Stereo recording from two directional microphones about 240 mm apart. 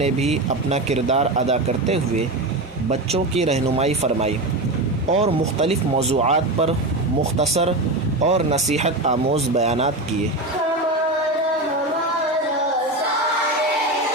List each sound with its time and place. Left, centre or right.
0.0 s speech: right